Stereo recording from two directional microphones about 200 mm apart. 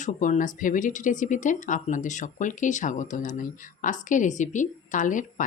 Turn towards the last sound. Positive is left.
turn(degrees=40)  # may be behind; listen again after turning